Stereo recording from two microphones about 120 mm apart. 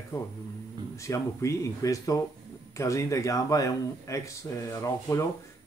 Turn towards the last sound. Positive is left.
turn(degrees=25)  # may be behind; listen again after turning